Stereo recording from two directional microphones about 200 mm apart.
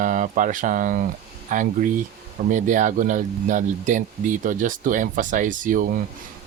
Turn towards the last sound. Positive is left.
turn(degrees=-40)  # may be behind; listen again after turning